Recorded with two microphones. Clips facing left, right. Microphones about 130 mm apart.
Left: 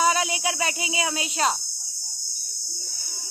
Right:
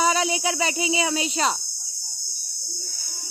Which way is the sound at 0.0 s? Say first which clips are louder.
Right 1 dB; 5° left (ahead or behind).